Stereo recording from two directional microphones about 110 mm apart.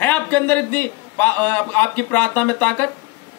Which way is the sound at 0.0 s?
15° left (ahead or behind).